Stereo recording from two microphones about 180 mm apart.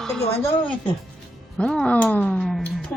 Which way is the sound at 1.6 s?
5° left (ahead or behind).